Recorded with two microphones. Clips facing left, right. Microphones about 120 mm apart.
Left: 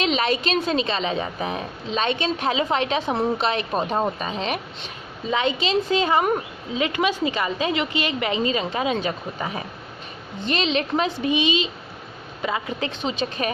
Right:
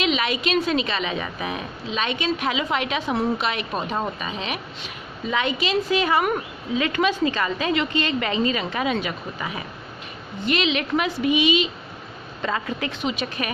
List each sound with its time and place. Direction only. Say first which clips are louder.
0.0 s a woman's voice: left 1 dB; 35° left (ahead or behind)
5.3 s speech: left 1 dB; 25° left (ahead or behind)